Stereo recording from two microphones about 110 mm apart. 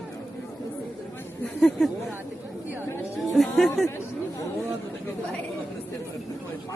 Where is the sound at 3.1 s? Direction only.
Centre (ahead or behind).